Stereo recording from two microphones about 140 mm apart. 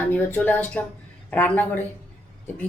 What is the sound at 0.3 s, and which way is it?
A woman's voice, 15° left (ahead or behind).